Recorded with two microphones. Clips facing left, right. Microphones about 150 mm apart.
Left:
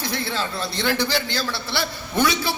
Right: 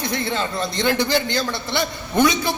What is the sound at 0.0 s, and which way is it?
Speech, 50° right (ahead or behind).